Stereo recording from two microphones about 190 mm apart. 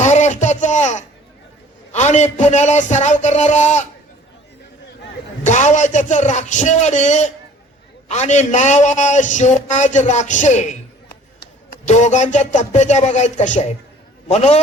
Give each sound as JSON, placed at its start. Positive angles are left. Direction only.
{"t": 0.0, "sound": "a sound", "side_deg": 40}
{"t": 1.9, "sound": "a man's voice", "side_deg": 35}
{"t": 5.4, "sound": "a man's voice", "side_deg": 40}